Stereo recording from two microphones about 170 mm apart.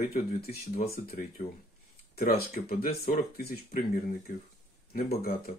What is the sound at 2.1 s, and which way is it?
Speech, 60° left (ahead or behind).